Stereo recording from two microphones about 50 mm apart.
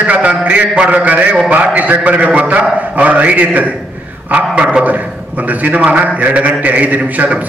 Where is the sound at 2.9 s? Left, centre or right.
Right.